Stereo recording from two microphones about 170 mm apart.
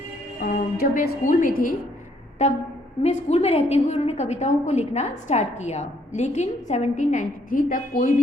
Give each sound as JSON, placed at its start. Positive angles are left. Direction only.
{"t": 0.3, "sound": "speech", "side_deg": 55}
{"t": 2.4, "sound": "a woman's voice", "side_deg": 45}